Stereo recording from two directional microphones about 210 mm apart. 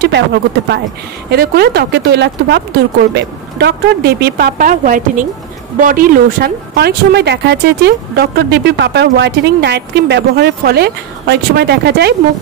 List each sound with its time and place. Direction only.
0.0 s speech: 55° right (ahead or behind)